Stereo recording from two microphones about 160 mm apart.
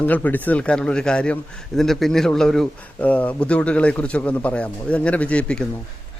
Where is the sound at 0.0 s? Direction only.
10° left (ahead or behind).